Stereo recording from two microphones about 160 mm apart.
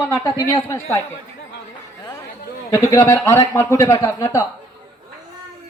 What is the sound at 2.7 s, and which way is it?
A woman's voice, 20° left (ahead or behind).